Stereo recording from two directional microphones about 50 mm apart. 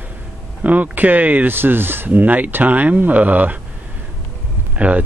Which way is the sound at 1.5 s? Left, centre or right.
Right.